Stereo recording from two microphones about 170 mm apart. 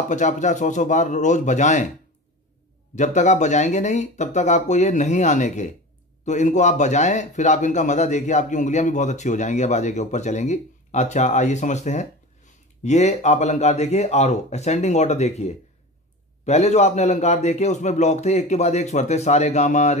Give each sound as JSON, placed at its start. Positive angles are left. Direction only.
{"t": 0.1, "sound": "speech", "side_deg": 45}
{"t": 3.0, "sound": "a man's voice", "side_deg": 45}